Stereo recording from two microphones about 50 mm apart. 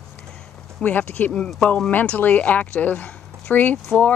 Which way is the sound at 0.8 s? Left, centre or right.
Left.